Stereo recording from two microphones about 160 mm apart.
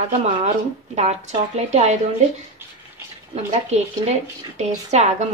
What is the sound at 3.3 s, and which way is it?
Speech, 40° right (ahead or behind).